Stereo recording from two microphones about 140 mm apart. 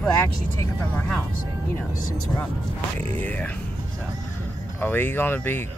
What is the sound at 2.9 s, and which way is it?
Speech, 10° left (ahead or behind).